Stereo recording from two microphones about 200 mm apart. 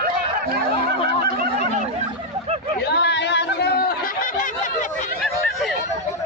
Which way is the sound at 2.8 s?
55° left (ahead or behind).